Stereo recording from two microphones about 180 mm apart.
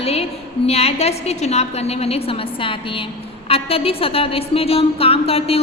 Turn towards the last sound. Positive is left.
turn(degrees=35)  # may be behind; listen again after turning